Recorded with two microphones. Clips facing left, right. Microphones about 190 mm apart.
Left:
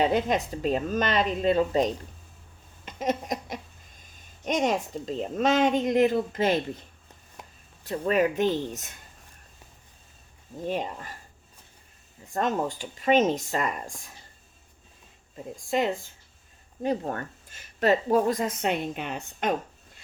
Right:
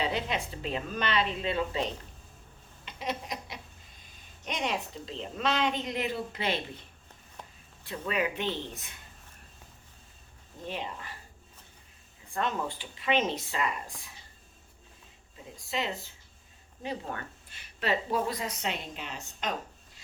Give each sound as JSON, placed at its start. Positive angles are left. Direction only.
{"t": 0.0, "sound": "speech", "side_deg": 45}
{"t": 2.8, "sound": "a sound", "side_deg": 45}
{"t": 4.0, "sound": "speech", "side_deg": 45}
{"t": 7.9, "sound": "speech", "side_deg": 45}
{"t": 10.7, "sound": "speech", "side_deg": 45}
{"t": 12.3, "sound": "speech", "side_deg": 40}
{"t": 15.5, "sound": "speech", "side_deg": 50}